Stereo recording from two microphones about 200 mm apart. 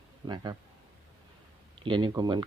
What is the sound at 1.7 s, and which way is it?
Speech, 25° right (ahead or behind).